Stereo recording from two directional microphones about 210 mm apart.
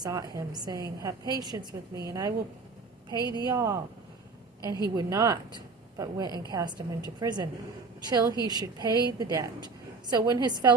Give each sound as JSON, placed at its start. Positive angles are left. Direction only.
{"t": 0.0, "sound": "a woman's voice", "side_deg": -15}
{"t": 4.9, "sound": "a woman's voice", "side_deg": -15}